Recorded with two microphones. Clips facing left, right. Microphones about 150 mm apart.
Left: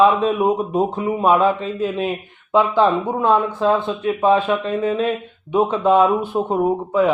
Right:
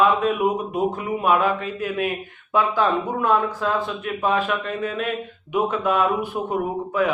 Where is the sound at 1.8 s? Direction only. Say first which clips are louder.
Left 4 dB; 25° left (ahead or behind).